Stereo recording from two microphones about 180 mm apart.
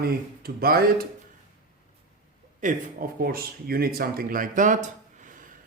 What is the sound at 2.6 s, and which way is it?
Speech, 50° right (ahead or behind).